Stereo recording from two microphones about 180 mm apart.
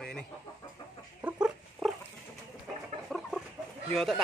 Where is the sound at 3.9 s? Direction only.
Centre (ahead or behind).